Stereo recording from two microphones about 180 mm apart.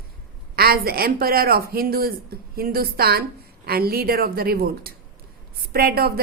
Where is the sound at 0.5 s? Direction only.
55° right (ahead or behind).